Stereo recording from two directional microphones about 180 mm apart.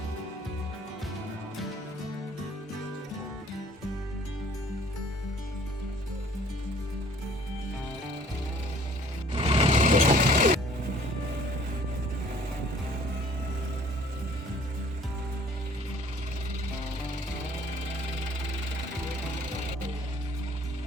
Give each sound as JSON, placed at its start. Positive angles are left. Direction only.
{"t": 9.3, "sound": "sewing machine", "side_deg": -30}